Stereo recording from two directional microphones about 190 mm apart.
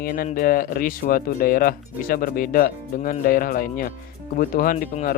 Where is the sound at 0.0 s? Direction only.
50° left (ahead or behind).